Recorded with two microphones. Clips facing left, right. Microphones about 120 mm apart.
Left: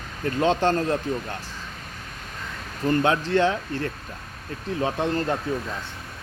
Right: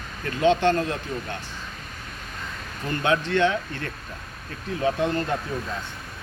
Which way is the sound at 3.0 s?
35° left (ahead or behind).